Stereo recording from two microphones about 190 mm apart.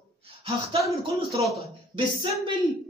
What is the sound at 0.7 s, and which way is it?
Speech, 15° right (ahead or behind).